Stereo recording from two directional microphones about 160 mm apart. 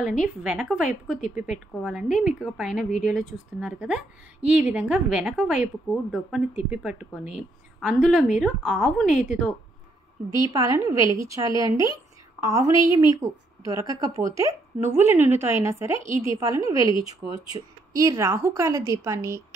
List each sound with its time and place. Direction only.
0.2 s a woman's voice: 5° right (ahead or behind)
10.5 s a woman's voice: 20° right (ahead or behind)